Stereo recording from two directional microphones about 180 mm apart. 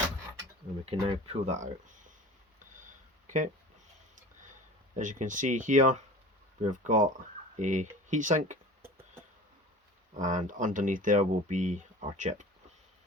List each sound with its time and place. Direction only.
0.9 s speech: 30° right (ahead or behind)
3.2 s speech: 45° right (ahead or behind)
4.9 s speech: 45° right (ahead or behind)
10.2 s speech: 45° right (ahead or behind)